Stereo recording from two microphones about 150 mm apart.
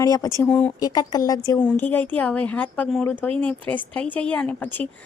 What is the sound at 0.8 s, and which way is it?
Speech, 25° left (ahead or behind).